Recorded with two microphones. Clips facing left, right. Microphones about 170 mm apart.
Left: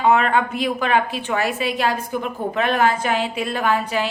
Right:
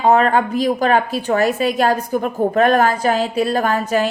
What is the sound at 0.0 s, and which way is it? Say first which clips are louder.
A woman's voice: right 3 dB; 40° right (ahead or behind).